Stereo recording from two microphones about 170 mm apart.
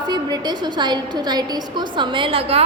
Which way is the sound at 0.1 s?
25° right (ahead or behind).